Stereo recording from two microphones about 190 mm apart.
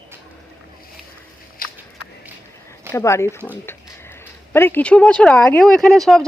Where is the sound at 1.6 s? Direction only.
50° left (ahead or behind).